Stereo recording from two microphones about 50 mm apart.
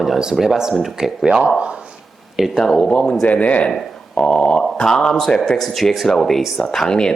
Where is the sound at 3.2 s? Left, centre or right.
Left.